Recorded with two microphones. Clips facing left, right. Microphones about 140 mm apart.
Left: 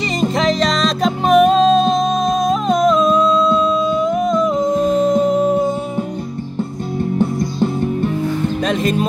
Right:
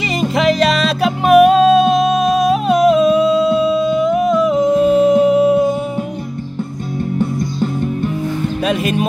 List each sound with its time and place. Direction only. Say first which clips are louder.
0.2 s music: right 2 dB; 10° right (ahead or behind)
3.0 s a sound: right 2 dB; 60° right (ahead or behind)
3.3 s music: right 2 dB; 10° right (ahead or behind)
3.6 s music: right 2 dB; 65° right (ahead or behind)
4.6 s humming: right 3 dB; 10° right (ahead or behind)
5.2 s a sound: right 3 dB; 70° right (ahead or behind)
8.6 s music: right 1 dB; 10° right (ahead or behind)